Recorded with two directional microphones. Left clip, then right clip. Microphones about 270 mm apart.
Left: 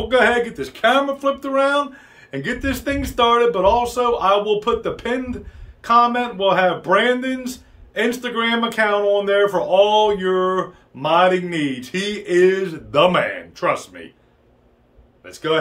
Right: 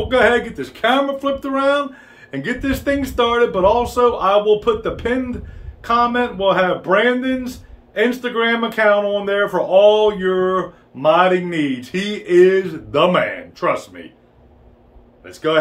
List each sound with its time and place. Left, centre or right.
0.1 s speech: centre
15.2 s speech: centre